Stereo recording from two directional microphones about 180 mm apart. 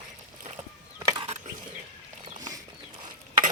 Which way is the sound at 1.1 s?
30° right (ahead or behind).